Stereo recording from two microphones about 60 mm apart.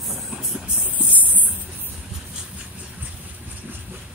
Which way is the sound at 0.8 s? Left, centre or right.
Right.